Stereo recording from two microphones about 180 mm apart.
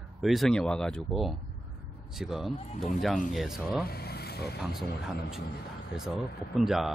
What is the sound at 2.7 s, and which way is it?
Speech, 45° left (ahead or behind).